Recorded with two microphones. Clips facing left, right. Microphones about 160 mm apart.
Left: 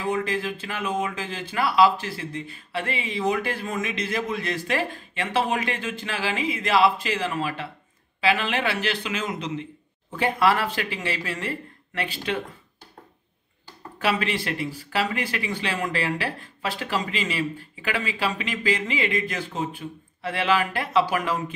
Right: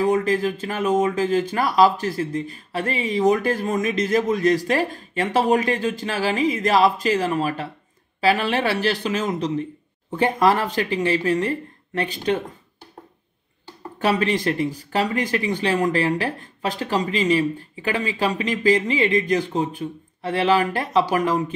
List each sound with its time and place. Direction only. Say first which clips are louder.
0.0 s speech: right 7 dB; 40° right (ahead or behind)
14.0 s speech: right 5 dB; 40° right (ahead or behind)